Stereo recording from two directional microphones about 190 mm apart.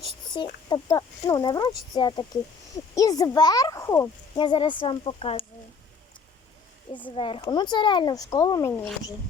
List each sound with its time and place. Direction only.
0.3 s a child's voice: 25° left (ahead or behind)
7.2 s a child's voice: 25° left (ahead or behind)